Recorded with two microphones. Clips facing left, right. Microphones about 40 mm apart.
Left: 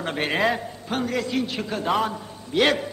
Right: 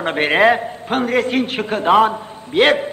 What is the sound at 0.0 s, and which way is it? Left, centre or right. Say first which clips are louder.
A man's voice: right 9 dB; right.